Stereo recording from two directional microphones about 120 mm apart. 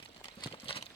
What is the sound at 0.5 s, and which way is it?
Engine, 50° left (ahead or behind).